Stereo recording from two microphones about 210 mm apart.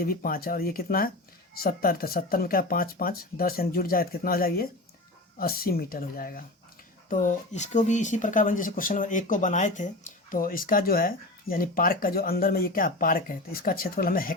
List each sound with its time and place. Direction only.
0.0 s speech: 45° left (ahead or behind)